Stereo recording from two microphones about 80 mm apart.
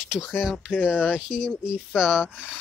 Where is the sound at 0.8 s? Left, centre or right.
Centre.